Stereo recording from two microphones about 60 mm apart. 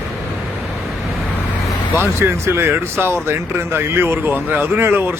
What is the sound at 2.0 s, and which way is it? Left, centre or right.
Speech, right.